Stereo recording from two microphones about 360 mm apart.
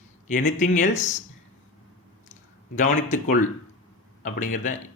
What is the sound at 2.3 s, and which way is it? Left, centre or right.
A man's voice, left.